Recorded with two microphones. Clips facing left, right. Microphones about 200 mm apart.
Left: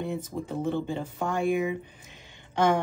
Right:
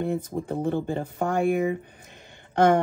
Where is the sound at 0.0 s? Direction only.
55° right (ahead or behind).